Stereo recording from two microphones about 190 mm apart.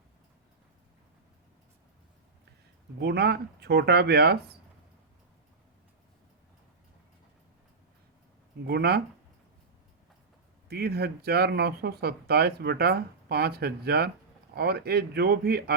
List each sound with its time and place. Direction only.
3.0 s speech: 60° right (ahead or behind)
8.6 s speech: 55° right (ahead or behind)
10.7 s speech: 55° right (ahead or behind)